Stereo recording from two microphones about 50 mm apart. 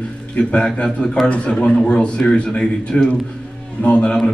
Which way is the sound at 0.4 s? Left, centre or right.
Centre.